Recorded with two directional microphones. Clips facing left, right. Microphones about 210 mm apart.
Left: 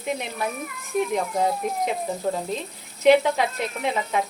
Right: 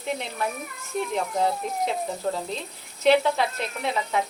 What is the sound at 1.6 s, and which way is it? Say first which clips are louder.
Speech: left 3 dB; 15° left (ahead or behind).